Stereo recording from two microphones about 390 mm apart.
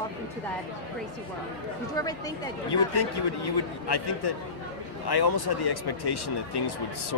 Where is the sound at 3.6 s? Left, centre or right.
Left.